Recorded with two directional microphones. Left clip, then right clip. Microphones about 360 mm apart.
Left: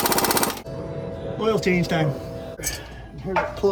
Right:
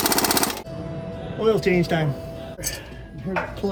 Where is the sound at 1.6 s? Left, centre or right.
Centre.